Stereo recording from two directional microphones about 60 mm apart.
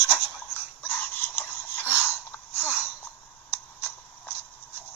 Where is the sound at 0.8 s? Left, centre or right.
Left.